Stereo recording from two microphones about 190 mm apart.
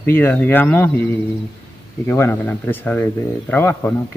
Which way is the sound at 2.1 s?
10° left (ahead or behind).